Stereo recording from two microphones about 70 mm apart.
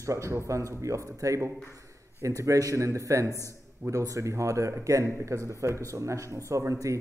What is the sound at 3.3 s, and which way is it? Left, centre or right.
Speech, left.